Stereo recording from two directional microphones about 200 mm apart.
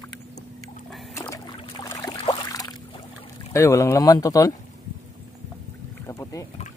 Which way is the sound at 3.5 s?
15° left (ahead or behind).